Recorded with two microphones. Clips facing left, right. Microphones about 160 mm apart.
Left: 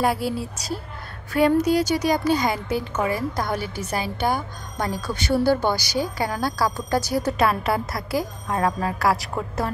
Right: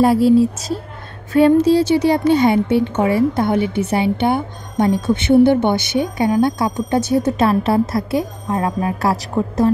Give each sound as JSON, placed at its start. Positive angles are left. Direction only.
{"t": 0.0, "sound": "speech", "side_deg": -30}